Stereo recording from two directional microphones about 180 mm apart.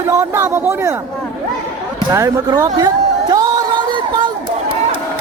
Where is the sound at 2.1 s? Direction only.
20° right (ahead or behind).